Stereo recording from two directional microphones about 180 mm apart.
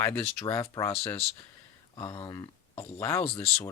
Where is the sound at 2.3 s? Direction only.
15° left (ahead or behind).